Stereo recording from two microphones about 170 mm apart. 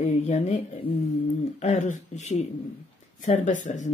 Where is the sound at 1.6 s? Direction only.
45° left (ahead or behind).